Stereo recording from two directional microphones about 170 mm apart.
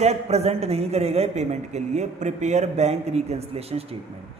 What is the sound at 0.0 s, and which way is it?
A man's voice, 40° right (ahead or behind).